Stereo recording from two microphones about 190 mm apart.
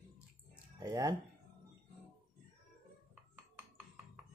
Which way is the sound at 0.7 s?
20° right (ahead or behind).